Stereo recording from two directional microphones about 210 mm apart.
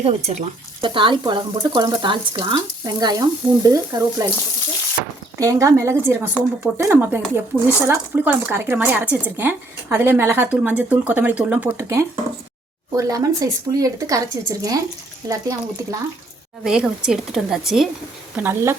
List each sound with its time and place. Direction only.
0.0 s speech: 30° right (ahead or behind)
5.4 s speech: 15° right (ahead or behind)
16.6 s speech: 5° right (ahead or behind)